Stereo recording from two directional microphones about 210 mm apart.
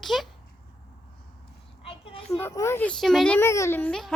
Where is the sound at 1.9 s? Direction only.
25° left (ahead or behind).